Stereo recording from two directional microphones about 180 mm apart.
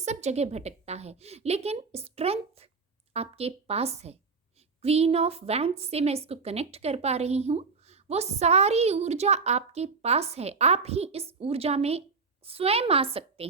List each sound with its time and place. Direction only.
0.0 s a woman's voice: 40° right (ahead or behind)